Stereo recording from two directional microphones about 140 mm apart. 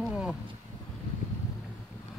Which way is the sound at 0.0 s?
5° right (ahead or behind).